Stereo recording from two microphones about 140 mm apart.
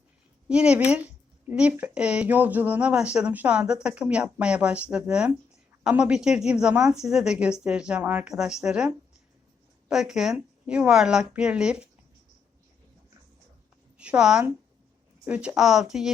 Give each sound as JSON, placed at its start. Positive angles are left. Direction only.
{"t": 0.4, "sound": "speech", "side_deg": -5}
{"t": 9.9, "sound": "speech", "side_deg": -5}
{"t": 14.0, "sound": "speech", "side_deg": -5}